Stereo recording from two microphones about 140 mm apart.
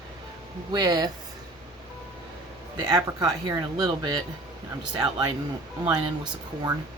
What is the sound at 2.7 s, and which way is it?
Speech, 25° right (ahead or behind).